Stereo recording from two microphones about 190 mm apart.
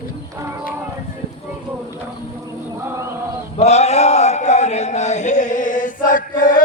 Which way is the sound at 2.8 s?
15° right (ahead or behind).